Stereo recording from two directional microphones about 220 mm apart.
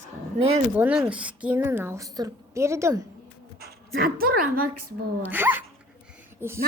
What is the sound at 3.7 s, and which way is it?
Speech, 40° right (ahead or behind).